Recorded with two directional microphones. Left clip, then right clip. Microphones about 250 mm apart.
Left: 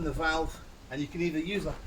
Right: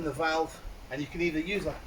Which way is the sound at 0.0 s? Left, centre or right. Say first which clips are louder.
Right 1 dB; centre.